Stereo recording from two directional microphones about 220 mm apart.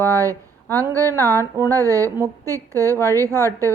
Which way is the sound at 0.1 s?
15° right (ahead or behind).